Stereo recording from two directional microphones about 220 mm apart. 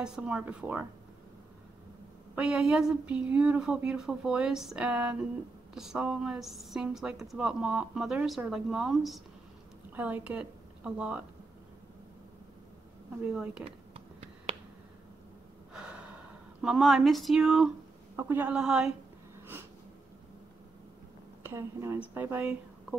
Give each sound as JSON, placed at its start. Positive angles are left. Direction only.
{"t": 0.0, "sound": "a woman's voice", "side_deg": -5}
{"t": 2.3, "sound": "a woman's voice", "side_deg": -5}
{"t": 13.3, "sound": "a woman's voice", "side_deg": -5}
{"t": 13.9, "sound": "finger snapping", "side_deg": -25}
{"t": 15.7, "sound": "gasp", "side_deg": -5}
{"t": 16.6, "sound": "a woman's voice", "side_deg": 0}
{"t": 21.4, "sound": "speech", "side_deg": -10}